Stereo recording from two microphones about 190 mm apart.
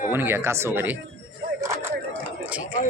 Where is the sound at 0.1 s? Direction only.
10° right (ahead or behind).